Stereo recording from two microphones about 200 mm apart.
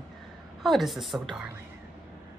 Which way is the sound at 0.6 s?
Centre (ahead or behind).